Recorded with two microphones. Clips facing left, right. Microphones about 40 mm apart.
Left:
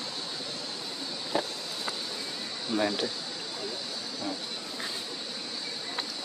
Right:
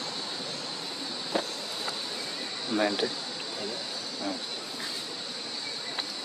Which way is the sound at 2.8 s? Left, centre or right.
Centre.